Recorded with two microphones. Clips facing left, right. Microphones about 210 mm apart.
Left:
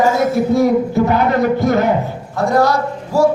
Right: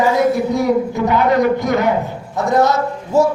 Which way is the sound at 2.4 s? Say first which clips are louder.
Even; 20° right (ahead or behind).